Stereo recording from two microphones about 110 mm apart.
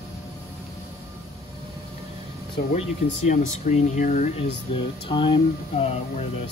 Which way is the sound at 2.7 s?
90° left.